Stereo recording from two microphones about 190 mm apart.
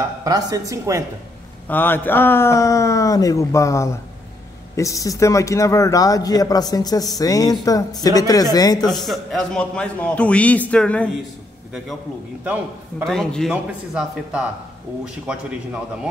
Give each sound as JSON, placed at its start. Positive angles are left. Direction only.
{"t": 0.2, "sound": "a woman's voice", "side_deg": -20}
{"t": 1.7, "sound": "speech", "side_deg": 10}
{"t": 8.9, "sound": "a man's voice", "side_deg": 0}
{"t": 13.0, "sound": "a man's voice", "side_deg": 5}